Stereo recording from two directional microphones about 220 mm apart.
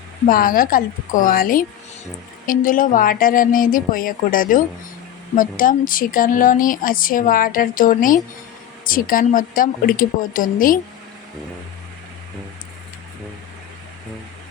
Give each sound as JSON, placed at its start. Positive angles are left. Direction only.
{"t": 0.3, "sound": "speech", "side_deg": 40}